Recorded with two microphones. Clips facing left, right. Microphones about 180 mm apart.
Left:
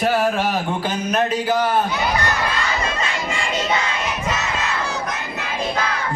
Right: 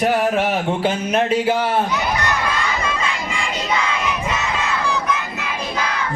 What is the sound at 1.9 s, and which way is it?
Crowd, 35° left (ahead or behind).